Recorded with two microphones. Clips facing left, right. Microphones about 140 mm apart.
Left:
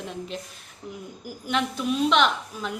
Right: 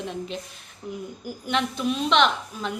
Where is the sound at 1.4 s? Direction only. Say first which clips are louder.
Right 1 dB; 5° left (ahead or behind).